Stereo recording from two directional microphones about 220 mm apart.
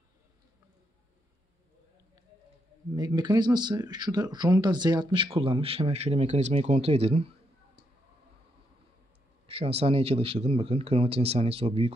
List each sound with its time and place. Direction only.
3.0 s speech: 15° right (ahead or behind)
9.5 s speech: 25° right (ahead or behind)